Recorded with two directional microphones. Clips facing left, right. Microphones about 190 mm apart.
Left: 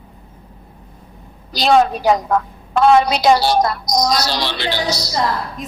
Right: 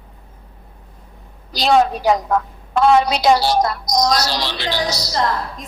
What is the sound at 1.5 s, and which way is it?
A woman's voice, 60° left (ahead or behind).